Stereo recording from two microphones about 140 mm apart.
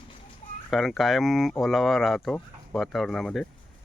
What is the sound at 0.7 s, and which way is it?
Speech, centre (ahead or behind).